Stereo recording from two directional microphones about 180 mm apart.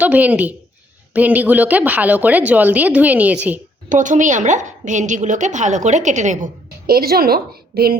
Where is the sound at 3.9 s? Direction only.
45° right (ahead or behind).